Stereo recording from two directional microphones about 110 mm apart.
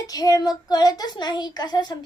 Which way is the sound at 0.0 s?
35° left (ahead or behind).